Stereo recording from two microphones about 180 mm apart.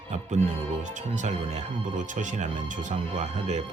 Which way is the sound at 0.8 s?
40° right (ahead or behind).